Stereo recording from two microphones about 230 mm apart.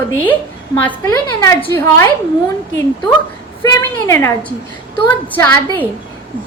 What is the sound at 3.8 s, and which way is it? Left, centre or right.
A woman's voice, centre.